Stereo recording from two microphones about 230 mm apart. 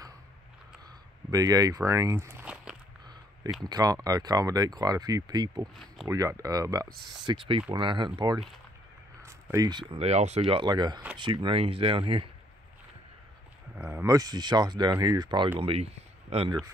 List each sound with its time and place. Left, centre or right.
1.3 s speech: centre
3.6 s speech: centre
13.7 s speech: centre; by 16.5 s right